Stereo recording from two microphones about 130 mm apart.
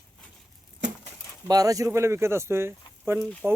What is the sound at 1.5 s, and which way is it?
Speech, 25° right (ahead or behind).